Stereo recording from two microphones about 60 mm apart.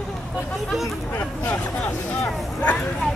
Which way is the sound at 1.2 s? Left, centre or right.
Left.